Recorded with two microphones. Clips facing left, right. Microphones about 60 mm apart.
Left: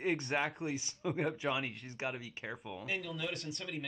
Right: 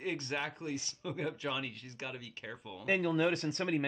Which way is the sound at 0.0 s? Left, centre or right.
Centre.